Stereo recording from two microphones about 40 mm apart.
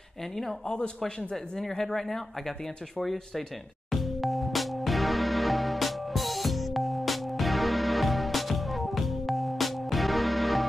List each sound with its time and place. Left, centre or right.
0.2 s speech: centre
0.7 s a man's voice: left
1.3 s speech: centre
3.9 s music: centre